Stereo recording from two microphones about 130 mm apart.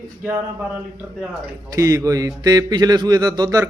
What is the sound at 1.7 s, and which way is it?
Speech, 25° right (ahead or behind).